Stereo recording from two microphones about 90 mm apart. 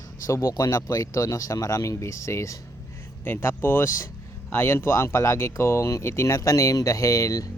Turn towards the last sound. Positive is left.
turn(degrees=40)  # may be behind; listen again after turning